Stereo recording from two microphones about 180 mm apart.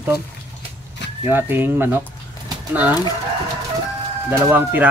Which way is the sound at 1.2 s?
10° right (ahead or behind).